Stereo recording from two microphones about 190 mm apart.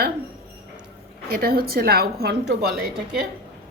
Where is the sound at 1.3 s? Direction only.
50° right (ahead or behind).